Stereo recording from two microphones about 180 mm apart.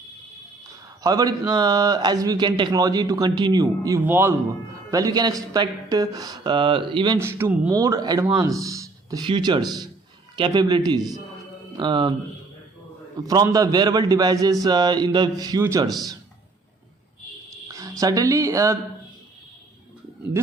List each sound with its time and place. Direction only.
1.0 s a man's voice: 20° right (ahead or behind)
7.2 s speech: 15° right (ahead or behind)
7.7 s a man's voice: 20° right (ahead or behind)
13.2 s a man's voice: 20° right (ahead or behind)
17.7 s speech: 20° right (ahead or behind)